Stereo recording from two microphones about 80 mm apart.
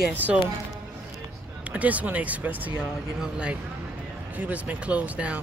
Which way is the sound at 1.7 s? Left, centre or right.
Centre.